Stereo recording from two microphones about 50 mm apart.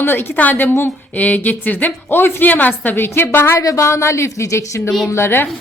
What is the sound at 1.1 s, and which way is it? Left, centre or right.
A woman's voice, left.